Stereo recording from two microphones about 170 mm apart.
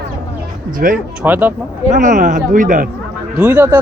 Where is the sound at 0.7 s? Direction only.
55° right (ahead or behind).